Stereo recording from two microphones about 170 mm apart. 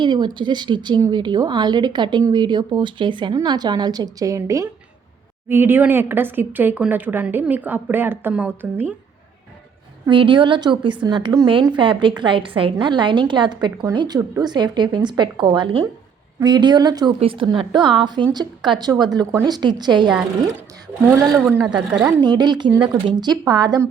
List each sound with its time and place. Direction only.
0.0 s a woman's voice: 25° right (ahead or behind); by 8.9 s 10° right (ahead or behind)
10.1 s a woman's voice: 30° right (ahead or behind)
21.4 s speech: 10° right (ahead or behind)
22.2 s a woman's voice: 25° right (ahead or behind)